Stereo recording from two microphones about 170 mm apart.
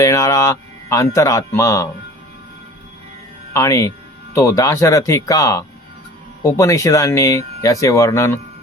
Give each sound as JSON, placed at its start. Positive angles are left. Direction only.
{"t": 0.0, "sound": "speech", "side_deg": 20}
{"t": 3.5, "sound": "speech", "side_deg": 20}